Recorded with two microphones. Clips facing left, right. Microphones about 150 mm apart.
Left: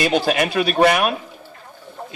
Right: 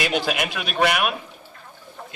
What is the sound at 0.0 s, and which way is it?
A man's voice, 35° left (ahead or behind).